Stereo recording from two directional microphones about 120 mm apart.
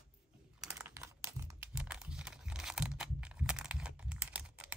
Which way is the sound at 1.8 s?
10° right (ahead or behind).